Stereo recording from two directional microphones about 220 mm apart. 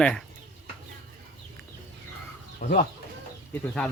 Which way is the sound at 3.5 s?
Centre (ahead or behind).